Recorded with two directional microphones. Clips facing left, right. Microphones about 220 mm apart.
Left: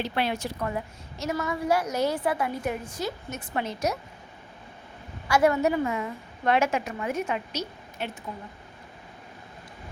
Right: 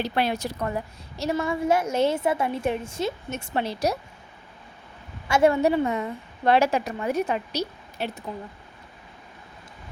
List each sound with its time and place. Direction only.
0.0 s a woman's voice: 40° right (ahead or behind)
5.3 s a woman's voice: 25° right (ahead or behind)